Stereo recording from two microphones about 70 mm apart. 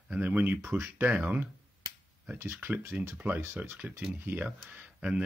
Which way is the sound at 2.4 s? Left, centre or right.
Right.